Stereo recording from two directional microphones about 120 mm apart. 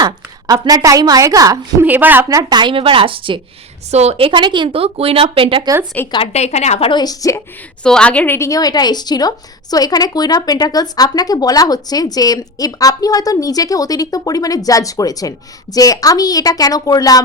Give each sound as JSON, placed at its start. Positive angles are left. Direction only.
{"t": 0.0, "sound": "a woman's voice", "side_deg": -35}
{"t": 1.8, "sound": "a woman's voice", "side_deg": -15}
{"t": 2.3, "sound": "speech", "side_deg": -35}
{"t": 3.9, "sound": "speech", "side_deg": -60}
{"t": 6.0, "sound": "a woman's voice", "side_deg": 15}
{"t": 6.3, "sound": "a woman's voice", "side_deg": 70}
{"t": 6.8, "sound": "a woman's voice", "side_deg": 35}
{"t": 7.9, "sound": "a woman's voice", "side_deg": 10}
{"t": 8.4, "sound": "a woman's voice", "side_deg": 30}